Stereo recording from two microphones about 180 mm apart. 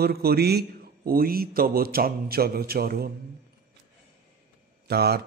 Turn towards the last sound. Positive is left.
turn(degrees=-60)  # may be behind; listen again after turning